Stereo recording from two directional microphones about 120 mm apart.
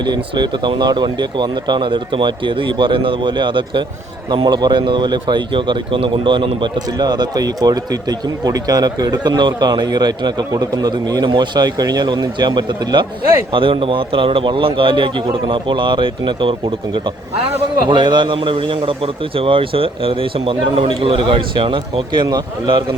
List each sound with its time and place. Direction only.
0.0 s a man's voice: 35° right (ahead or behind)